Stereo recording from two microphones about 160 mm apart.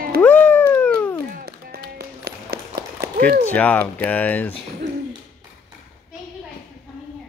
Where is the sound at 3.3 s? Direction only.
10° left (ahead or behind).